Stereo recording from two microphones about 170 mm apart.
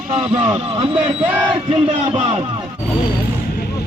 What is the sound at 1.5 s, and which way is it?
Speech, 30° right (ahead or behind).